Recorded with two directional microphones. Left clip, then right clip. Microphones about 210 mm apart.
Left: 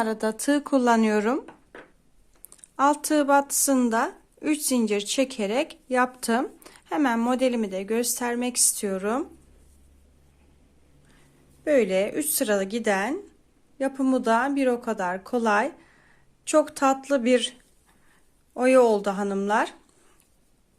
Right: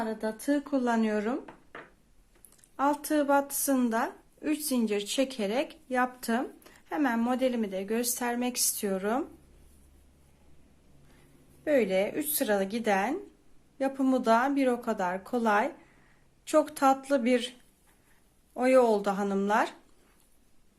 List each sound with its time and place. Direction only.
0.0 s speech: 45° left (ahead or behind)
2.7 s a woman's voice: 30° left (ahead or behind)
11.6 s a woman's voice: 25° left (ahead or behind)
18.5 s a woman's voice: 25° left (ahead or behind)